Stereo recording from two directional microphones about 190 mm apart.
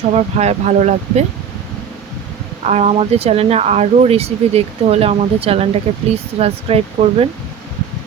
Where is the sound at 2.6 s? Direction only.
35° right (ahead or behind).